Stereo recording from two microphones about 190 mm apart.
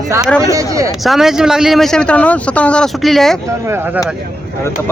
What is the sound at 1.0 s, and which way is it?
Speech, centre (ahead or behind).